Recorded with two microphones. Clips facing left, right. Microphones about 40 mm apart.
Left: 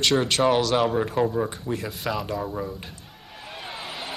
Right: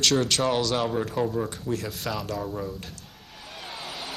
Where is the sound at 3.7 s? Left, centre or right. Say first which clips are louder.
Left 1 dB; centre.